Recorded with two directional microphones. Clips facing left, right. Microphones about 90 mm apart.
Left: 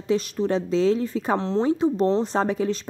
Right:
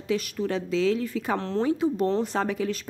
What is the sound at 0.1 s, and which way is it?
Speech, 30° left (ahead or behind).